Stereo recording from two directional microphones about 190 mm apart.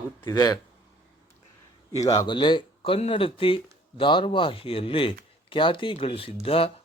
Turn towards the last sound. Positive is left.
turn(degrees=30)  # may be behind; listen again after turning